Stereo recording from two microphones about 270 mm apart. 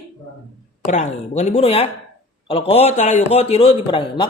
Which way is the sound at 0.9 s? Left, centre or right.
Left.